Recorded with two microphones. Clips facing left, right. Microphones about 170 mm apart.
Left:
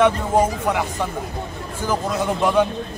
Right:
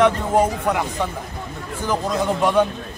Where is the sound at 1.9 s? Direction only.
5° left (ahead or behind).